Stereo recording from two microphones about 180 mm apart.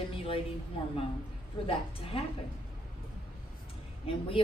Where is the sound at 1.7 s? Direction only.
30° left (ahead or behind).